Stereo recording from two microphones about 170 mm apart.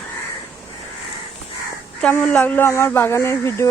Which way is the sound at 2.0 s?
10° left (ahead or behind).